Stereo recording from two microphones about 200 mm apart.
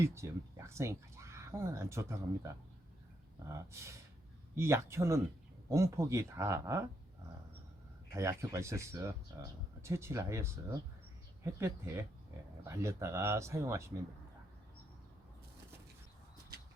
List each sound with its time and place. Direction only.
0.0 s speech: 15° right (ahead or behind)
3.5 s speech: 15° right (ahead or behind)
8.1 s speech: 15° right (ahead or behind)
12.6 s speech: 15° right (ahead or behind)